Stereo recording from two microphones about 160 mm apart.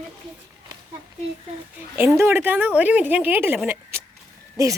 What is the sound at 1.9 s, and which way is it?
A woman's voice, 15° right (ahead or behind).